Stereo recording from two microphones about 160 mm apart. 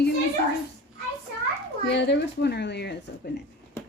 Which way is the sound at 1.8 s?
90° left.